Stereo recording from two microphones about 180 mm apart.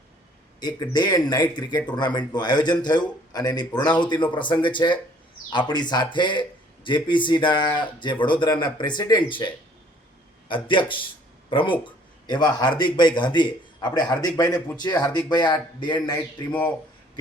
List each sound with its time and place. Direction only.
0.6 s a man's voice: 25° left (ahead or behind)
10.5 s a man's voice: 30° left (ahead or behind)
16.5 s speech: 10° left (ahead or behind)